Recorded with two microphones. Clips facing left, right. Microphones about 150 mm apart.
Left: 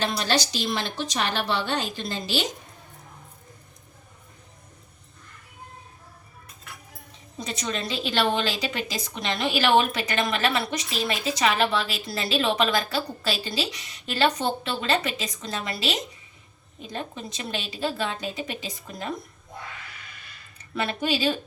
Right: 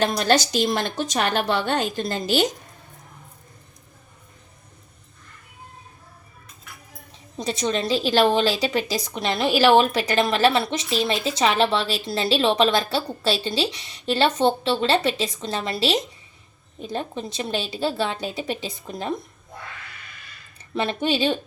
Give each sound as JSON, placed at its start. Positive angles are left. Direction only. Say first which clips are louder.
{"t": 0.0, "sound": "a woman's voice", "louder": "right 5 dB", "side_deg": -50}
{"t": 7.4, "sound": "a woman's voice", "louder": "right 7 dB", "side_deg": -30}
{"t": 20.7, "sound": "a woman's voice", "louder": "right 4 dB", "side_deg": -25}